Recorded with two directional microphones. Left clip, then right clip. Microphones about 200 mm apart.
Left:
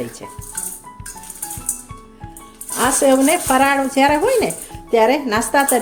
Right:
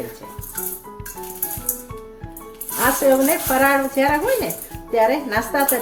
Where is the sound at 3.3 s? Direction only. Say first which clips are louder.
Left 2 dB; 50° left (ahead or behind).